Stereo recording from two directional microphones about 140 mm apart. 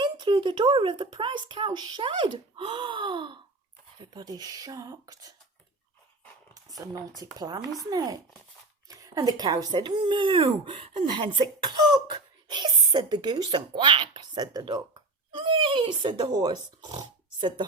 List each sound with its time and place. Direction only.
0.0 s speech: 35° right (ahead or behind)
6.5 s a sound: 25° right (ahead or behind)
7.3 s speech: 30° right (ahead or behind)